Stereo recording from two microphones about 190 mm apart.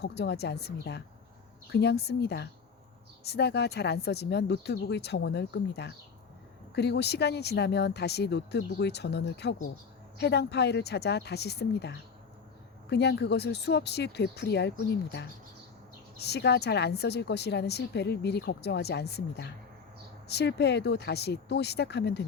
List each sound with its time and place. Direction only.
0.0 s a woman's voice: 60° left (ahead or behind)